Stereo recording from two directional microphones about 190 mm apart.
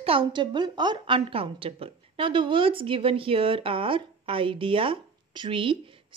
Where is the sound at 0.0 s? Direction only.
30° right (ahead or behind).